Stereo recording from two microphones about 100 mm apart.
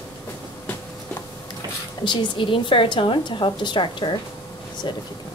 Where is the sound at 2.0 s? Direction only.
55° left (ahead or behind).